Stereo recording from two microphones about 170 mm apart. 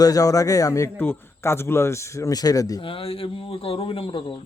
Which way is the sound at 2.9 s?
35° left (ahead or behind).